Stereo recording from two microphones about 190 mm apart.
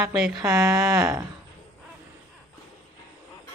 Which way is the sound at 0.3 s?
15° right (ahead or behind).